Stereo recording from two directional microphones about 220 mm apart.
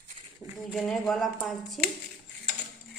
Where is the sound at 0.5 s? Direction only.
Centre (ahead or behind).